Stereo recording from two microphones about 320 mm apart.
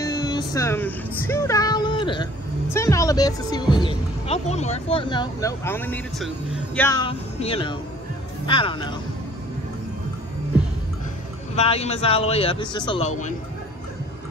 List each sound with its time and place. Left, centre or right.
0.0 s child singing: centre
2.7 s speech: centre
11.5 s speech: centre